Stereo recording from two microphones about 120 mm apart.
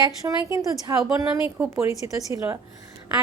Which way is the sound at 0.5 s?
25° right (ahead or behind).